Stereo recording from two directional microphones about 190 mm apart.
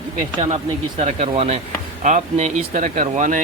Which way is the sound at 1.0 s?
35° right (ahead or behind).